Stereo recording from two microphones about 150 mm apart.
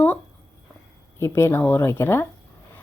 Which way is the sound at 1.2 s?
15° left (ahead or behind).